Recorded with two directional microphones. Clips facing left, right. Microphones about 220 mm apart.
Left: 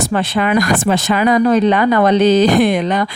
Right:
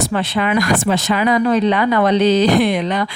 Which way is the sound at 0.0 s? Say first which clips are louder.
Left 2 dB; 45° left (ahead or behind).